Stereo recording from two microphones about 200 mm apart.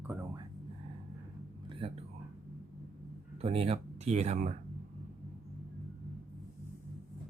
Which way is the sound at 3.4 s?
30° right (ahead or behind).